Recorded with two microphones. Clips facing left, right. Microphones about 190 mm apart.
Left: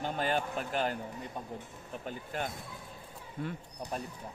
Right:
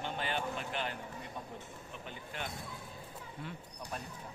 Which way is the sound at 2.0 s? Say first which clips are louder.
Left 7 dB; 40° left (ahead or behind).